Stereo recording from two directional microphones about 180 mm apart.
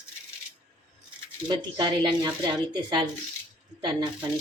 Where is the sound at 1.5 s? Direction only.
25° right (ahead or behind).